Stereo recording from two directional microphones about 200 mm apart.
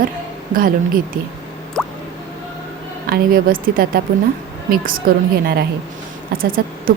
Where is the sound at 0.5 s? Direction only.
45° right (ahead or behind).